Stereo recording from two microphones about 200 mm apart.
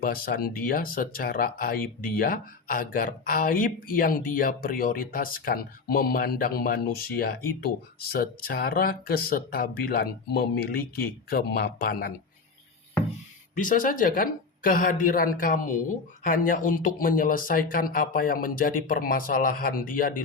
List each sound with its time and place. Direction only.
0.0 s speech: 45° left (ahead or behind)
13.6 s speech: 40° left (ahead or behind)